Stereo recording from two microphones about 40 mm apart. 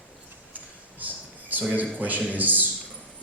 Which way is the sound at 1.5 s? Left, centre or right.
Right.